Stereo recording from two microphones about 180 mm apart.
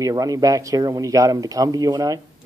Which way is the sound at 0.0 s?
20° right (ahead or behind).